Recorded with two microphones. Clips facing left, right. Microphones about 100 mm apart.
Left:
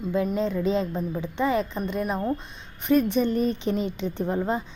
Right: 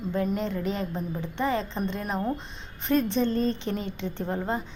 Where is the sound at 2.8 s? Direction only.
10° left (ahead or behind).